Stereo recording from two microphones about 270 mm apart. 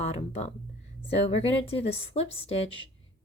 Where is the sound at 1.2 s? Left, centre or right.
Left.